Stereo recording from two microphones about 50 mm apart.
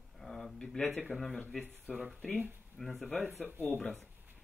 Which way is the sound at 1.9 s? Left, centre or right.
Left.